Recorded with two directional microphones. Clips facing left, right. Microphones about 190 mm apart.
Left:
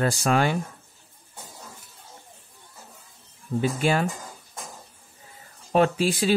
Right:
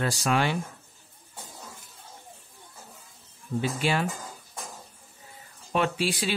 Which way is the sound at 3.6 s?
45° left (ahead or behind).